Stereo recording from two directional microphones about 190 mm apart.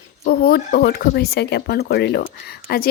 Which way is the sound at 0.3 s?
55° left (ahead or behind).